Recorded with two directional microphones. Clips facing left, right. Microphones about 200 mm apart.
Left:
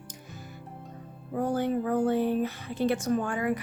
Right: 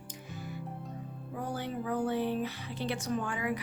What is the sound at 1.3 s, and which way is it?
Speech, 50° left (ahead or behind).